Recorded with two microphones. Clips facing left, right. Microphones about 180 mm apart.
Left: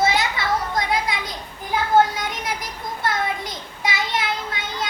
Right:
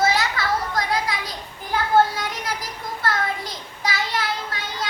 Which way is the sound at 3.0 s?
20° left (ahead or behind).